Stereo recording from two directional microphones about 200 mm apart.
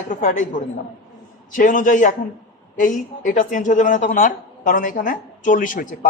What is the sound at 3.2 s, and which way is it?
Speech, 40° left (ahead or behind).